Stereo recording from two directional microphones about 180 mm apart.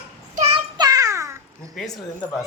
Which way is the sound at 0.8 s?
20° right (ahead or behind).